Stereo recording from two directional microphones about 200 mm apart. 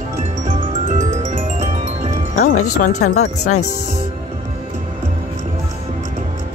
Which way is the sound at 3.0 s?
90° left.